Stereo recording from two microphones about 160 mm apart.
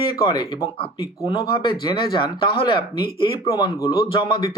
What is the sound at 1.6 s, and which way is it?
Speech, 30° left (ahead or behind).